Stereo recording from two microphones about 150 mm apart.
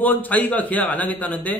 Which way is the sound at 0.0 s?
10° left (ahead or behind).